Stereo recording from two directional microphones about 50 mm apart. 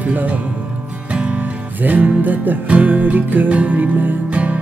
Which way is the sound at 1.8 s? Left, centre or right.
Right.